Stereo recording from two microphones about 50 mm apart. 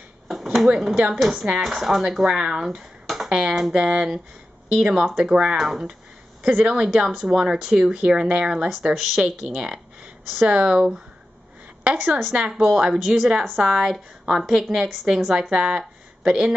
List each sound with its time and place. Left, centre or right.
0.3 s a sound: centre
0.7 s speech: centre
8.9 s a woman's voice: centre; by 12.1 s right
12.4 s speech: centre
13.4 s speech: centre